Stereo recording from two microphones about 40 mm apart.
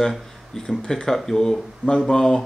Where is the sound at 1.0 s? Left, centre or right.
Centre.